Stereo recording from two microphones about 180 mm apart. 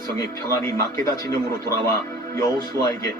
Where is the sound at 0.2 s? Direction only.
15° left (ahead or behind).